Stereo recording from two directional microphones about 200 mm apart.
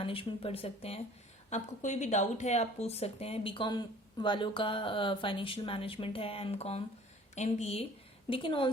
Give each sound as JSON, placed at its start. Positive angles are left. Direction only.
{"t": 0.0, "sound": "a woman's voice", "side_deg": 25}